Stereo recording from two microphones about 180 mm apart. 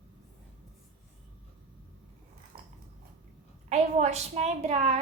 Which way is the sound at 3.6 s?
40° right (ahead or behind).